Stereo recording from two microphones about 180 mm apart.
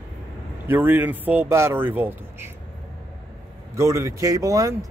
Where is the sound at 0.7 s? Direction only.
10° right (ahead or behind).